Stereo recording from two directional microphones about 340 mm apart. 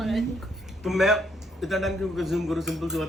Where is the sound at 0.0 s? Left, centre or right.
Centre.